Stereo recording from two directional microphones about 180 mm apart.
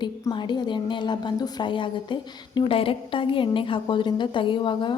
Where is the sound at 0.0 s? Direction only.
25° left (ahead or behind).